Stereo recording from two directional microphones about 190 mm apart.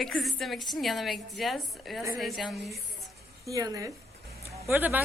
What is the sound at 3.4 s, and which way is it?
A woman's voice, 20° right (ahead or behind).